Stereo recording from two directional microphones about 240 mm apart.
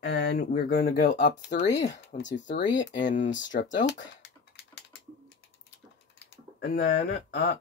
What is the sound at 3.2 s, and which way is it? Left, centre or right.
Speech, left.